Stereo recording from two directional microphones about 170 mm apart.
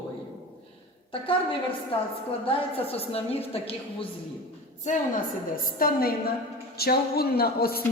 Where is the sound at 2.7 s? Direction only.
35° left (ahead or behind).